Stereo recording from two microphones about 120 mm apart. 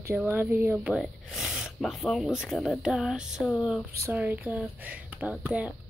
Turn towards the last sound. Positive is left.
turn(degrees=-10)  # may be behind; listen again after turning